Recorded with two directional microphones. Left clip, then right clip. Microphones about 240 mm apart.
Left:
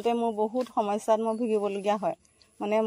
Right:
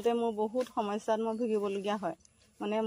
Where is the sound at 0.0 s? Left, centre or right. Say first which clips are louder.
Left 4 dB; left.